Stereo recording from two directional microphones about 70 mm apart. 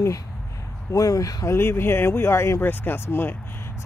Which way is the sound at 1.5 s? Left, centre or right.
Left.